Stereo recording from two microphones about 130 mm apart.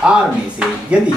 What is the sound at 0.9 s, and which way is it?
Speech, 10° right (ahead or behind).